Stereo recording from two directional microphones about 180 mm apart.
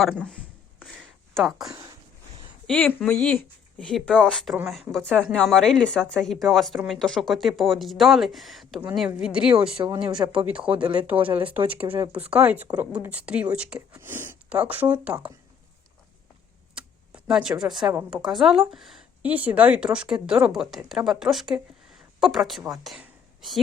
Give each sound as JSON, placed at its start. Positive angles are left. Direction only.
{"t": 0.0, "sound": "speech", "side_deg": 0}
{"t": 0.8, "sound": "a sound", "side_deg": 0}
{"t": 2.6, "sound": "speech", "side_deg": 5}
{"t": 4.9, "sound": "speech", "side_deg": -10}
{"t": 5.3, "sound": "speech", "side_deg": 5}
{"t": 9.7, "sound": "speech", "side_deg": -25}
{"t": 10.3, "sound": "speech", "side_deg": -5}
{"t": 11.9, "sound": "speech", "side_deg": -30}
{"t": 12.3, "sound": "speech", "side_deg": -10}
{"t": 17.2, "sound": "a woman's voice", "side_deg": -5}